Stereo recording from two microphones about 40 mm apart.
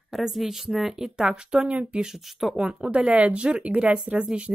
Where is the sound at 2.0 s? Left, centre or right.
Centre.